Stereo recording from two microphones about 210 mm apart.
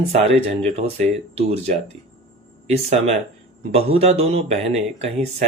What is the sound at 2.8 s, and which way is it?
Speech, 30° right (ahead or behind).